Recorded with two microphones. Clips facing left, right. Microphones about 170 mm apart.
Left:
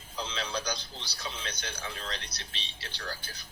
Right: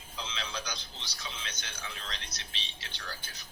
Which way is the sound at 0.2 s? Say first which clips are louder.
Left 5 dB; 35° left (ahead or behind).